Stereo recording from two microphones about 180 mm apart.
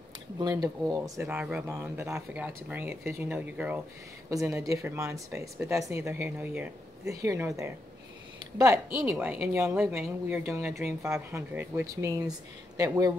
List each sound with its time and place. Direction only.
0.4 s speech: 20° right (ahead or behind)